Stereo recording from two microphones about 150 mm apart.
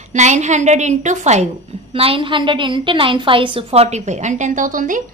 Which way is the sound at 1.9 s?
40° right (ahead or behind).